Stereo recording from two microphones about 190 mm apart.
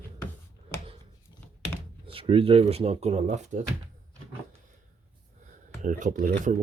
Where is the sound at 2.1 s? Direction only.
30° right (ahead or behind).